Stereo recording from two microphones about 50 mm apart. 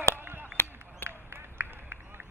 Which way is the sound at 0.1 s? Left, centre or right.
Right.